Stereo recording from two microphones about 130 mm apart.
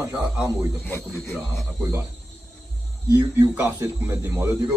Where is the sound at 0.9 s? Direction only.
15° left (ahead or behind).